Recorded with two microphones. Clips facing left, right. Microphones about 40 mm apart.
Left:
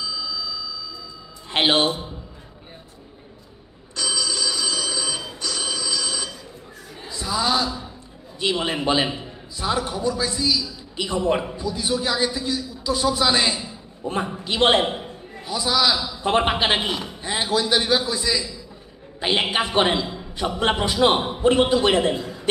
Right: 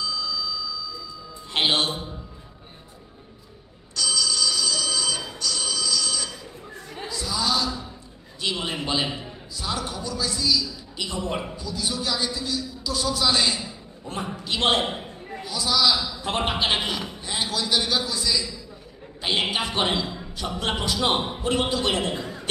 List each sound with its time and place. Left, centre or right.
0.0 s a sound: centre
1.5 s a man's voice: left
1.9 s a man's voice: centre
3.9 s telephone bell ringing: left
7.1 s a sound: left
8.4 s a man's voice: left
19.5 s a man's voice: left
20.3 s a man's voice: left